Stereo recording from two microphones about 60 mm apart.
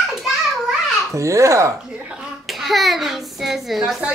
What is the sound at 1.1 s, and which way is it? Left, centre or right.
Speech, right.